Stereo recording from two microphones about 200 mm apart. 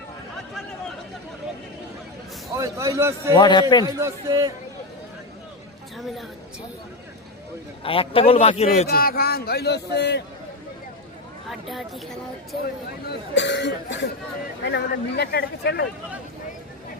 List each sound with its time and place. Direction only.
2.6 s a man's voice: 15° right (ahead or behind)
3.3 s a man's voice: 20° left (ahead or behind)
4.0 s a man's voice: 15° right (ahead or behind)
7.9 s a man's voice: 25° left (ahead or behind)
8.9 s a man's voice: 50° left (ahead or behind)
11.4 s speech: centre (ahead or behind)
13.3 s speech: 60° left (ahead or behind)